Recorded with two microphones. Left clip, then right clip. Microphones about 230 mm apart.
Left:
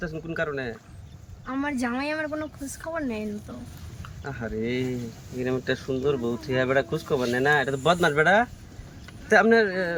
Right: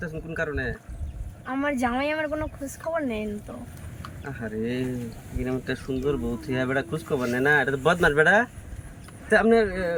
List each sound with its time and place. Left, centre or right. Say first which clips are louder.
0.0 s speech: left 1 dB; centre
1.5 s a woman's voice: right 3 dB; centre
4.2 s speech: left 1 dB; centre